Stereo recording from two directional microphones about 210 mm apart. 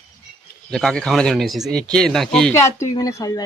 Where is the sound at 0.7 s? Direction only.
5° left (ahead or behind).